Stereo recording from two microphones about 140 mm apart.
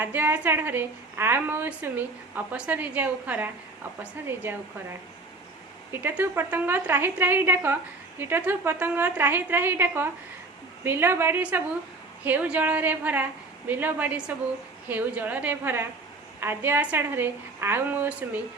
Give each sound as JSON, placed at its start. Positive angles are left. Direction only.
{"t": 0.0, "sound": "a woman's voice", "side_deg": -15}
{"t": 5.9, "sound": "a woman's voice", "side_deg": -15}